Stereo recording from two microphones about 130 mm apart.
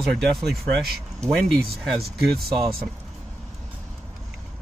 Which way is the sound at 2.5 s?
30° right (ahead or behind).